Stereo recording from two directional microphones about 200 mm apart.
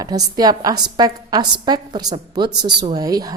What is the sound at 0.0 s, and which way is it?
A woman's voice, 20° right (ahead or behind).